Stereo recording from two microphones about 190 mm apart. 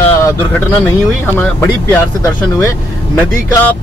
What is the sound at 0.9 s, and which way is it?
Speech, 10° left (ahead or behind).